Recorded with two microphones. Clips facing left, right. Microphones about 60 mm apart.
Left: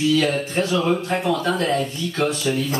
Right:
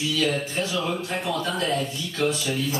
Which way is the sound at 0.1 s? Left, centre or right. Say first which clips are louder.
Left 5 dB; left.